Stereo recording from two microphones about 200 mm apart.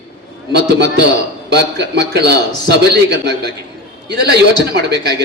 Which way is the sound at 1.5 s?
55° right (ahead or behind).